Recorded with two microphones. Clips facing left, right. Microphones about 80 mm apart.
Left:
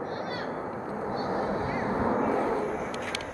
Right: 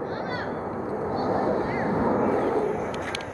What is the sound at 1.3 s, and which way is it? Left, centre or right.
Vehicle, right.